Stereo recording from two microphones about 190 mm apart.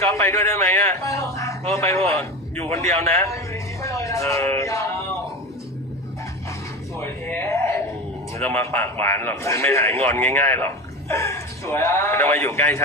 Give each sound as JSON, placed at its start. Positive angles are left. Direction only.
{"t": 0.1, "sound": "a man's voice", "side_deg": 15}
{"t": 6.9, "sound": "a sound", "side_deg": 15}
{"t": 8.4, "sound": "a man's voice", "side_deg": 10}